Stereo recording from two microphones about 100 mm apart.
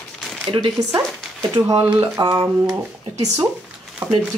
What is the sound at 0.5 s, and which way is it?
Speech, 50° right (ahead or behind).